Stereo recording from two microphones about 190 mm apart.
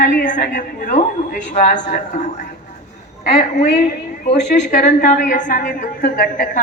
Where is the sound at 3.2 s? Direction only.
35° left (ahead or behind).